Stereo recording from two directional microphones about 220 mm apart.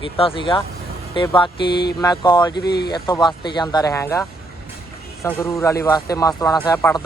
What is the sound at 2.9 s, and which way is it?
Speech, 20° left (ahead or behind).